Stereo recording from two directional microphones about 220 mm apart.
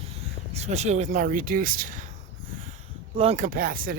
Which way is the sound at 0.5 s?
30° right (ahead or behind).